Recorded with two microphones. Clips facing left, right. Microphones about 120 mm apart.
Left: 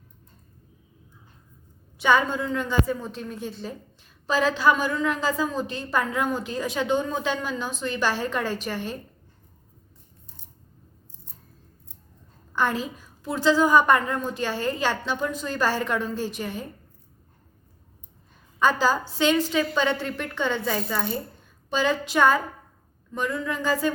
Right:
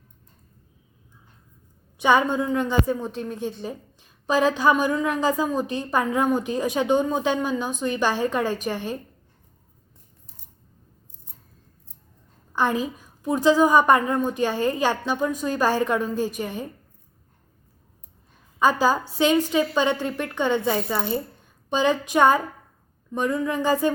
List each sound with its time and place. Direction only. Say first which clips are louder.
2.0 s a woman's voice: right 2 dB; 20° right (ahead or behind)
12.5 s a woman's voice: right 2 dB; 15° right (ahead or behind)
18.6 s a woman's voice: right 2 dB; 10° right (ahead or behind)